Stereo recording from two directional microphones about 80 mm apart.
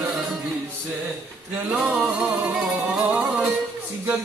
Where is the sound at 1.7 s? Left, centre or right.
Centre.